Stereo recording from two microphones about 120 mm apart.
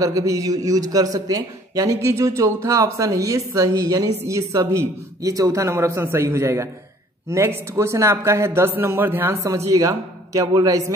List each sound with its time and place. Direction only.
0.0 s speech: 25° right (ahead or behind)